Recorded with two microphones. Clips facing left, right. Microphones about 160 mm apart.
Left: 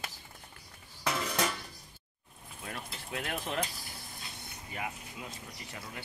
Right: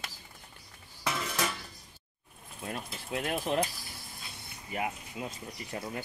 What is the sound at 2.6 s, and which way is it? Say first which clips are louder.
Speech: right 4 dB; 25° right (ahead or behind).